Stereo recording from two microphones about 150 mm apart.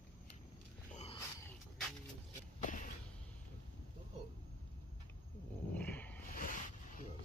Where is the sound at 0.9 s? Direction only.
45° left (ahead or behind).